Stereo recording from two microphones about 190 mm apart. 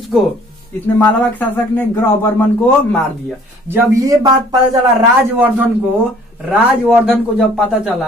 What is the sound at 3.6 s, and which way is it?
Speech, 15° right (ahead or behind).